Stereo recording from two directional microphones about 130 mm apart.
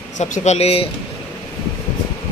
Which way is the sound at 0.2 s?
60° left (ahead or behind).